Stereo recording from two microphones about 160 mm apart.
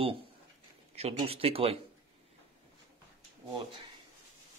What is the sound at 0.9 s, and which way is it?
Speech, 40° right (ahead or behind).